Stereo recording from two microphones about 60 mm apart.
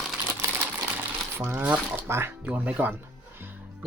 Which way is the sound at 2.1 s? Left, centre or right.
Right.